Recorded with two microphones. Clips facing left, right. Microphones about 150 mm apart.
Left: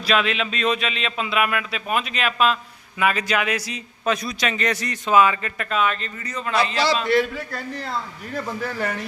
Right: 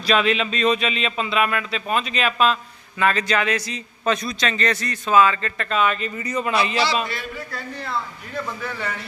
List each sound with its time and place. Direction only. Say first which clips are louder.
0.0 s a man's voice: right 2 dB; centre (ahead or behind)
6.1 s a man's voice: right 1 dB; 15° right (ahead or behind)
7.1 s a man's voice: left 11 dB; 90° left
8.6 s a man's voice: left 3 dB; 45° left (ahead or behind)